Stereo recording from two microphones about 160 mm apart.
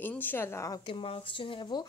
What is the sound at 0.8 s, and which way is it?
Speech, 35° left (ahead or behind).